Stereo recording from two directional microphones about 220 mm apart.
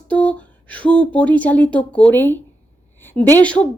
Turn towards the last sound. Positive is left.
turn(degrees=5)  # may be behind; listen again after turning